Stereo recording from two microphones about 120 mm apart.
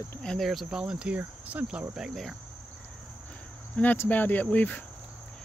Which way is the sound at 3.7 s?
15° left (ahead or behind).